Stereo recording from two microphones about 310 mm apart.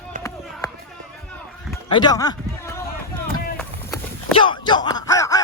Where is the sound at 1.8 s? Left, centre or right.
Centre.